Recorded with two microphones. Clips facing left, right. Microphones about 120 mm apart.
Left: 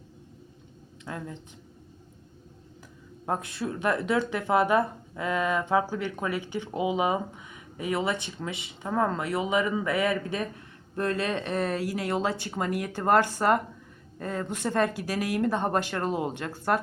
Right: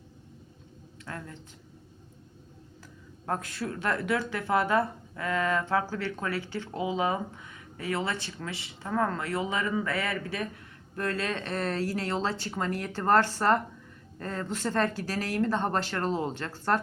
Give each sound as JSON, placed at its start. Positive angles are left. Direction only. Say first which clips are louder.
{"t": 1.0, "sound": "speech", "louder": "left 4 dB", "side_deg": 15}
{"t": 3.2, "sound": "speech", "louder": "left 2 dB", "side_deg": 20}